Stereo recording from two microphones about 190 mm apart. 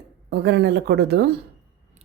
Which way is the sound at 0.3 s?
60° right (ahead or behind).